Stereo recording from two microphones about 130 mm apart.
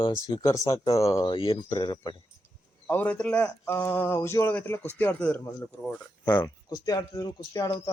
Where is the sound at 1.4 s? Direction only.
45° left (ahead or behind).